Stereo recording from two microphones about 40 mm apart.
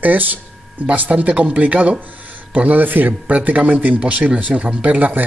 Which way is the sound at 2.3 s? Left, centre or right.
Right.